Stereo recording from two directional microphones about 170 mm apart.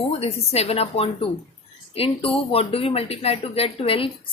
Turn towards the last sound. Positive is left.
turn(degrees=30)  # may be behind; listen again after turning